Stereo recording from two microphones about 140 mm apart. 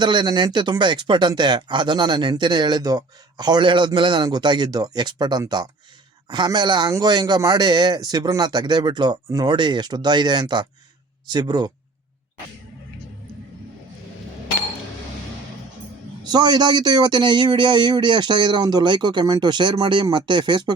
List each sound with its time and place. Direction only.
0.0 s speech: 30° right (ahead or behind)
16.2 s speech: 30° right (ahead or behind)